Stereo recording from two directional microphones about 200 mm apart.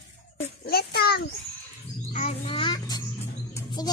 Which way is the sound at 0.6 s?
50° left (ahead or behind).